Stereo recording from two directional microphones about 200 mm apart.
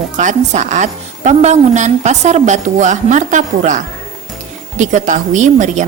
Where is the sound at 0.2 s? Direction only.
40° right (ahead or behind).